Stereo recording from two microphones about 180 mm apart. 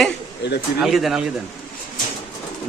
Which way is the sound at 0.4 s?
75° left (ahead or behind).